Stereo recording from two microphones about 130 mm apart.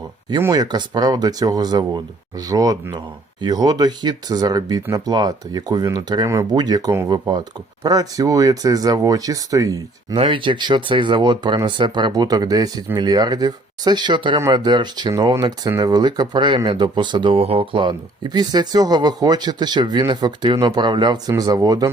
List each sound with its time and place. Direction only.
0.5 s speech: 30° right (ahead or behind)
10.2 s speech: 40° right (ahead or behind)